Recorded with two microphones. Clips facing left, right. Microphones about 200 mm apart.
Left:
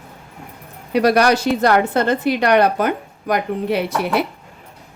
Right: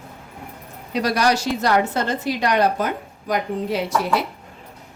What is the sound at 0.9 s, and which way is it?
A woman's voice, 60° left (ahead or behind).